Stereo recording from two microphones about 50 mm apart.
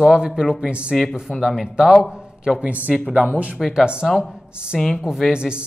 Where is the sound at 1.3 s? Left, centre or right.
Centre.